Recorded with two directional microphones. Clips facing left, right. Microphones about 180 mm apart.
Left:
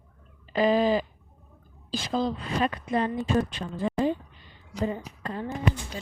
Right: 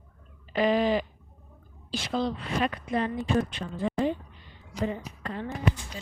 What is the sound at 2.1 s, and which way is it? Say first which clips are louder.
Speech: left 1 dB; 35° left (ahead or behind).